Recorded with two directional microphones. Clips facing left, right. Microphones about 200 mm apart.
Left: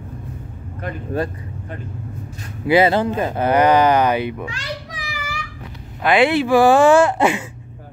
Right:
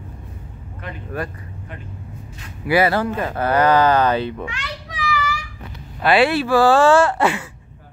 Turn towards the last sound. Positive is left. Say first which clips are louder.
# left 2 dB
turn(degrees=15)  # may be behind; listen again after turning